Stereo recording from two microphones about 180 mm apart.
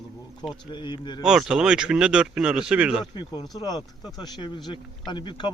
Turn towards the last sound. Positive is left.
turn(degrees=25)  # may be behind; listen again after turning